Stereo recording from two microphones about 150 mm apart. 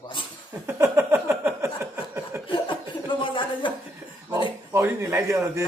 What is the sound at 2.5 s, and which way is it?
Chuckle, 30° left (ahead or behind).